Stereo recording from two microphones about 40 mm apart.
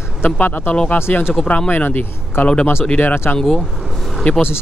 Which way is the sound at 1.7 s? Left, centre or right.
Left.